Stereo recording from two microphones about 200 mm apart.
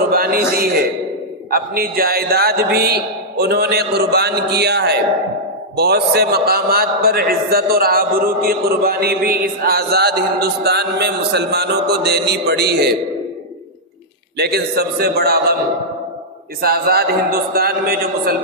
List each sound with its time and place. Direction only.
0.1 s a man's voice: 45° right (ahead or behind)
14.3 s a man's voice: 55° right (ahead or behind)
16.6 s a man's voice: 50° right (ahead or behind)